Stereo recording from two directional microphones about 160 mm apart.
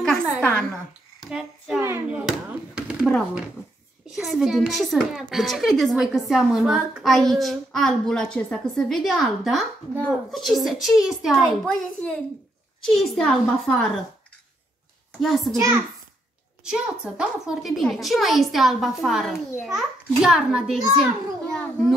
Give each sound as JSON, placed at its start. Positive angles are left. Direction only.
{"t": 0.4, "sound": "a woman's voice", "side_deg": 10}
{"t": 1.2, "sound": "a child's voice", "side_deg": -5}
{"t": 1.8, "sound": "a sound", "side_deg": -10}
{"t": 4.1, "sound": "a child's voice", "side_deg": 0}
{"t": 15.2, "sound": "a child's voice", "side_deg": 0}
{"t": 15.5, "sound": "a child's voice", "side_deg": -20}
{"t": 16.6, "sound": "a child's voice", "side_deg": -5}